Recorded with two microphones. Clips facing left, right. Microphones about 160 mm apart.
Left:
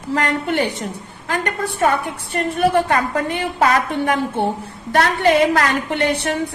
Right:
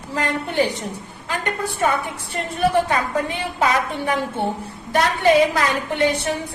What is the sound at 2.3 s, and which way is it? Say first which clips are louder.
A woman's voice: left 2 dB; 65° left (ahead or behind).